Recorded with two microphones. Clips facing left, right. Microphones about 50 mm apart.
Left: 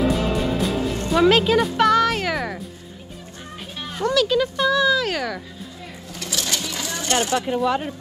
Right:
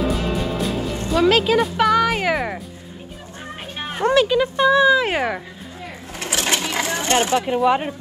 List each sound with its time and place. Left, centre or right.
0.2 s music: centre
3.7 s music: right
4.3 s speech: right
6.1 s sewing machine: right